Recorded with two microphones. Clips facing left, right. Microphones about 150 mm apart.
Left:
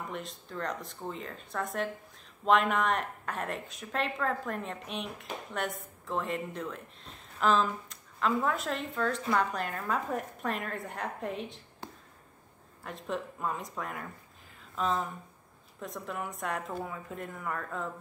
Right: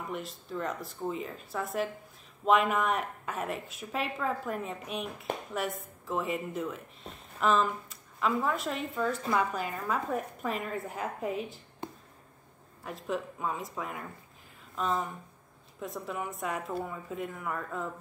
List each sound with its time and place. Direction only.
0.1 s speech: centre (ahead or behind)
11.8 s a sound: 20° right (ahead or behind)
12.8 s speech: centre (ahead or behind)